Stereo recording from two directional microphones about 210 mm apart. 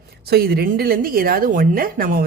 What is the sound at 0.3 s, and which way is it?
A woman's voice, 50° right (ahead or behind).